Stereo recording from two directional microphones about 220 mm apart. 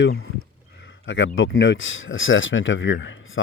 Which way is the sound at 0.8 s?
60° left (ahead or behind).